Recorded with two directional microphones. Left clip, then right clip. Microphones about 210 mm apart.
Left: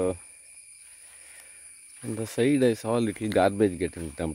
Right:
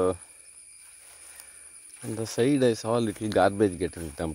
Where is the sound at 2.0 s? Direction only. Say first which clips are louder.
Even; 25° left (ahead or behind).